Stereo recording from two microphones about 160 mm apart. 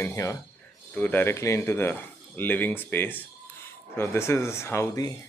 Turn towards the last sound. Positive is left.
turn(degrees=20)  # may be behind; listen again after turning